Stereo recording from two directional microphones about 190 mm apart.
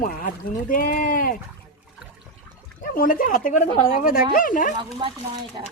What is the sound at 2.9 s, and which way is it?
Speech, 50° left (ahead or behind).